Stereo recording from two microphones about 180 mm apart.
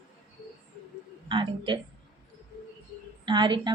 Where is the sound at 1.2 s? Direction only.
25° right (ahead or behind).